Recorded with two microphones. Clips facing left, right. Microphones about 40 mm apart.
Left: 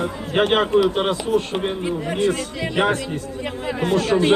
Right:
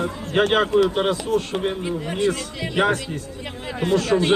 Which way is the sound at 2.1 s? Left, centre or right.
Left.